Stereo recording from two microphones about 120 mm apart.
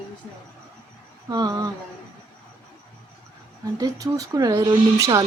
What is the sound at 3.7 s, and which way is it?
Speech, 30° right (ahead or behind).